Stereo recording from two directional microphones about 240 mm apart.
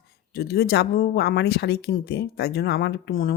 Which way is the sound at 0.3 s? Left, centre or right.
Left.